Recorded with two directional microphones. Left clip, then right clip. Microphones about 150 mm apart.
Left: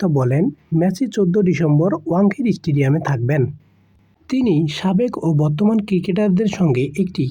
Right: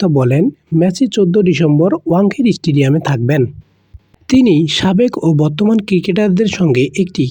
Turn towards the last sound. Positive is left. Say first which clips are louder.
# right 7 dB
turn(degrees=-25)  # may be behind; listen again after turning